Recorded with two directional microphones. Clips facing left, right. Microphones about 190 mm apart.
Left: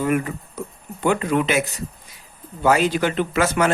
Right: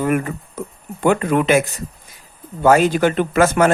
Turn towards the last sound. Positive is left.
turn(degrees=-50)  # may be behind; listen again after turning